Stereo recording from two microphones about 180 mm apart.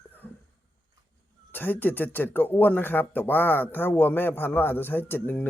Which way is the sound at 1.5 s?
10° left (ahead or behind).